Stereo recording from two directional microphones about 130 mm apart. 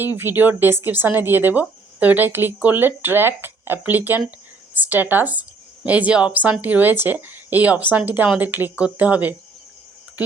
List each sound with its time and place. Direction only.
0.0 s speech: 15° right (ahead or behind)